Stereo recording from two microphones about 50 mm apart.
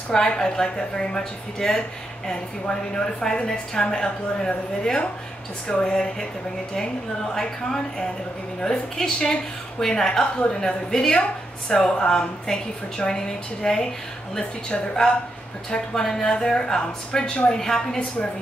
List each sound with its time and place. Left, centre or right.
0.1 s a woman's voice: centre
7.3 s a woman's voice: centre